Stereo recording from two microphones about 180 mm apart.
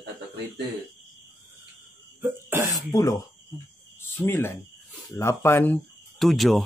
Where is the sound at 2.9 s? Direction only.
20° left (ahead or behind); by 6.6 s centre (ahead or behind).